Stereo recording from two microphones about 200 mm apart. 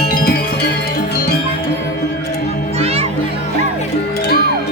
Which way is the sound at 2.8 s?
30° right (ahead or behind).